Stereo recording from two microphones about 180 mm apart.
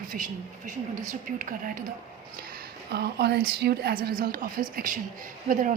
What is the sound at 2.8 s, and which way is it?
A woman's voice, 65° right (ahead or behind).